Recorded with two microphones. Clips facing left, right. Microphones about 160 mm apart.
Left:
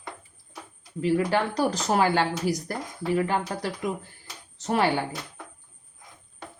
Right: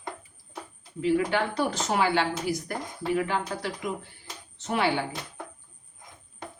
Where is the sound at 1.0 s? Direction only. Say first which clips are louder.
Left 1 dB; 40° left (ahead or behind).